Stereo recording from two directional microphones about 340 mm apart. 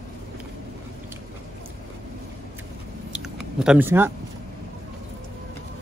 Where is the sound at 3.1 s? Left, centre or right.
Centre.